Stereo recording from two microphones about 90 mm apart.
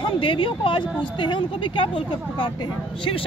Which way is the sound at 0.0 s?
70° left (ahead or behind).